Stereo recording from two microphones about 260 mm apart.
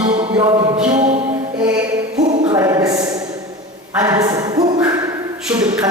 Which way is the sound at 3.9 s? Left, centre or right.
Centre.